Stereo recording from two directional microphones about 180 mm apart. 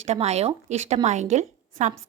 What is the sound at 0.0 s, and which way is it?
A woman's voice, 35° right (ahead or behind).